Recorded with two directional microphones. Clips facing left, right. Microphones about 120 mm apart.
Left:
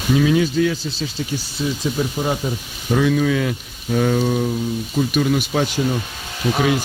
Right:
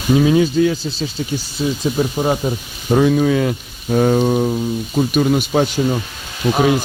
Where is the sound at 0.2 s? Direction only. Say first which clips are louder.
Right 3 dB; 30° right (ahead or behind).